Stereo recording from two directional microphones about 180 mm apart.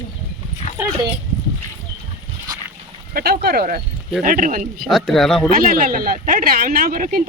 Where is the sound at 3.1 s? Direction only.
60° right (ahead or behind).